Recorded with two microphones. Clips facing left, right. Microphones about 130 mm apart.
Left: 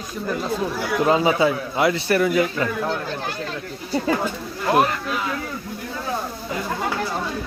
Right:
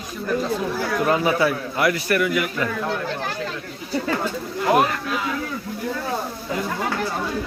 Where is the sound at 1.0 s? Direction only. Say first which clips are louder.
Left 2 dB; 20° left (ahead or behind).